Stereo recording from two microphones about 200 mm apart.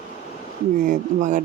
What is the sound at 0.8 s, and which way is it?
Speech, 40° right (ahead or behind).